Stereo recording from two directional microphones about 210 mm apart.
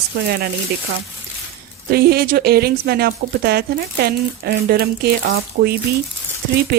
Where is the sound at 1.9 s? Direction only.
45° right (ahead or behind).